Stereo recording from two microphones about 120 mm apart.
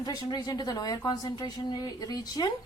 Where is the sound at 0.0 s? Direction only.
35° left (ahead or behind).